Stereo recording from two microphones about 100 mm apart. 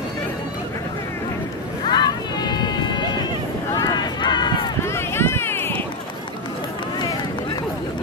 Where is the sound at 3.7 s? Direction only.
40° left (ahead or behind).